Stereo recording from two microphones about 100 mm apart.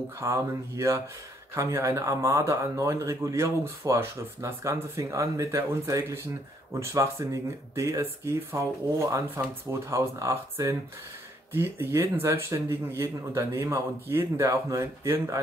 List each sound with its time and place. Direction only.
0.2 s speech: 30° right (ahead or behind)